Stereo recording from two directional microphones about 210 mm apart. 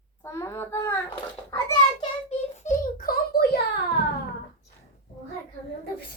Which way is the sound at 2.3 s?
40° left (ahead or behind).